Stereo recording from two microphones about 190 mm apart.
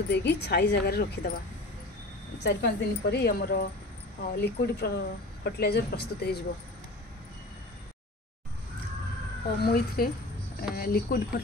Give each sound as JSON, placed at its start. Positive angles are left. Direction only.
{"t": 0.1, "sound": "speech", "side_deg": 60}
{"t": 9.6, "sound": "speech", "side_deg": 55}